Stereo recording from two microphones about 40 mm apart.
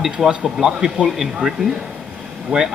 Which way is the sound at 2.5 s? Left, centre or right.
Right.